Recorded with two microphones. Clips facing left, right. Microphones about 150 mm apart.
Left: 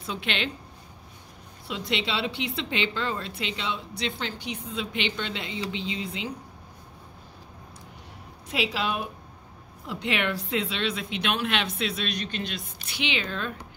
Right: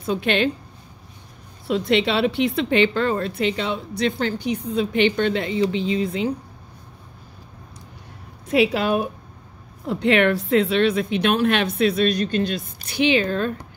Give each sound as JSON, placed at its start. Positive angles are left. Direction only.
{"t": 0.0, "sound": "a woman's voice", "side_deg": -45}
{"t": 1.7, "sound": "a woman's voice", "side_deg": -55}
{"t": 8.5, "sound": "a woman's voice", "side_deg": -50}